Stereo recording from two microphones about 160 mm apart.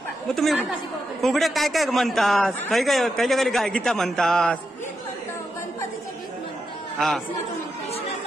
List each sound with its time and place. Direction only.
0.3 s a man's voice: centre (ahead or behind)